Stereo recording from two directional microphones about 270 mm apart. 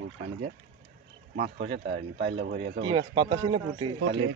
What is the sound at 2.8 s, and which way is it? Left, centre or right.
Speech, centre.